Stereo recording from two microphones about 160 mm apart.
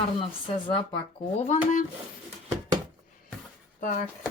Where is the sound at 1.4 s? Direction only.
45° left (ahead or behind).